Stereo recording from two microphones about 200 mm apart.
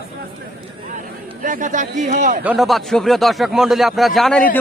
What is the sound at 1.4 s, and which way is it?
Speech, 40° right (ahead or behind).